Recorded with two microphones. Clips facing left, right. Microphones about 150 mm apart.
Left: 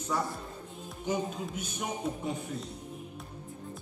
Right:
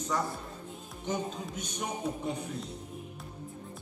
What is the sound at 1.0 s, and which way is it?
Music, 10° left (ahead or behind).